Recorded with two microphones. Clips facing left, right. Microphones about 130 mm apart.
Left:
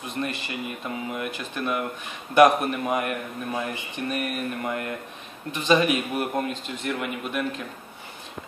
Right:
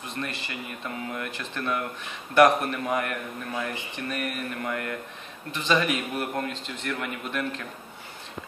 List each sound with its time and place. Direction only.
0.2 s a man's voice: 20° left (ahead or behind)